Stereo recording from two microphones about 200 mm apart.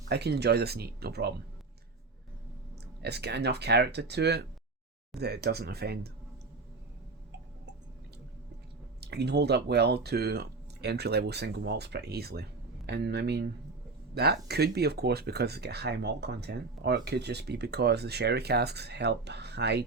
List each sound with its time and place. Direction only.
0.1 s speech: 55° right (ahead or behind)
3.0 s speech: 55° right (ahead or behind)
9.0 s speech: 55° right (ahead or behind)